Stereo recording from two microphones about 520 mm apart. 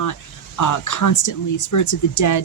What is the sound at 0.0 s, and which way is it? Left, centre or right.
Speech, left.